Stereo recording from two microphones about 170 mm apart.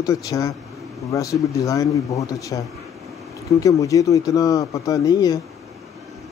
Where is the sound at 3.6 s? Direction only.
20° left (ahead or behind).